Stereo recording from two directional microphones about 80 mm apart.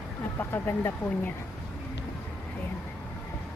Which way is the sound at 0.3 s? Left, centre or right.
Left.